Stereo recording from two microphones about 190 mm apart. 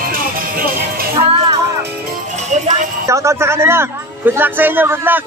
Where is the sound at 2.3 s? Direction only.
35° right (ahead or behind).